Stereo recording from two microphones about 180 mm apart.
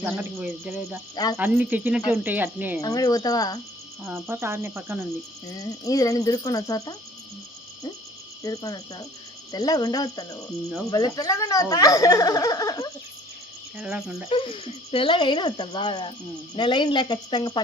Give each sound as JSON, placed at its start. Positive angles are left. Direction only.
{"t": 0.0, "sound": "speech", "side_deg": -10}
{"t": 1.1, "sound": "speech", "side_deg": 20}
{"t": 1.4, "sound": "speech", "side_deg": -10}
{"t": 2.8, "sound": "speech", "side_deg": 20}
{"t": 4.0, "sound": "speech", "side_deg": -15}
{"t": 5.5, "sound": "speech", "side_deg": 20}
{"t": 8.4, "sound": "speech", "side_deg": 20}
{"t": 13.7, "sound": "insect", "side_deg": -5}
{"t": 14.3, "sound": "speech", "side_deg": 30}